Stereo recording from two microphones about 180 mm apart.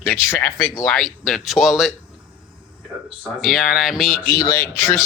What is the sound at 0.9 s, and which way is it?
Speech, centre (ahead or behind).